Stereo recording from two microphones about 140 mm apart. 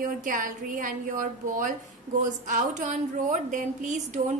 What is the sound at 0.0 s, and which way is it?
A woman's voice, 70° right (ahead or behind).